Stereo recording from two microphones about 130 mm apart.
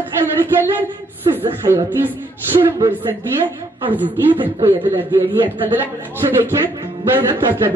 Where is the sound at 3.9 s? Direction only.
15° right (ahead or behind).